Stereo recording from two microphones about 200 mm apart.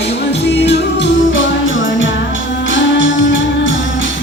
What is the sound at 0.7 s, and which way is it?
Music, 60° left (ahead or behind).